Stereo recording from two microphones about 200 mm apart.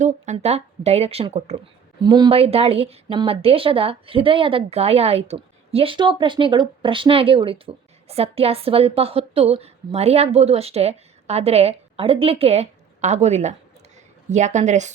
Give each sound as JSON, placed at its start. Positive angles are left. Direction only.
{"t": 0.0, "sound": "speech", "side_deg": -35}